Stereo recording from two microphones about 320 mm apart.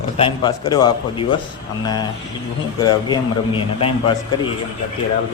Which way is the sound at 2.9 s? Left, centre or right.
Centre.